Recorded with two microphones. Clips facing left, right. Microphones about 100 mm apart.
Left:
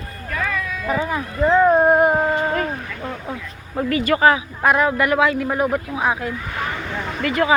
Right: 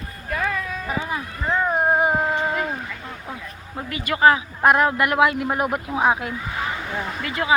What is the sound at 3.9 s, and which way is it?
Speech, 40° left (ahead or behind).